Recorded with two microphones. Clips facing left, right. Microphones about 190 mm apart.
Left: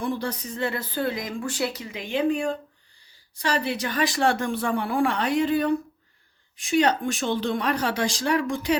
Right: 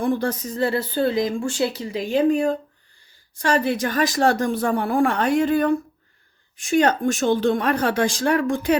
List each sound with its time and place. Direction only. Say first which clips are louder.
0.0 s speech: right 6 dB; 50° right (ahead or behind)